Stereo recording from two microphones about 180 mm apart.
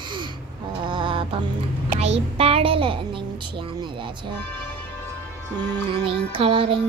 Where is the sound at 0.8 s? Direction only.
25° right (ahead or behind).